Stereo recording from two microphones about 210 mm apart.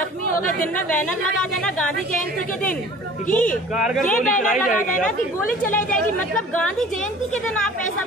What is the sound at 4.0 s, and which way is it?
Speech, 40° left (ahead or behind).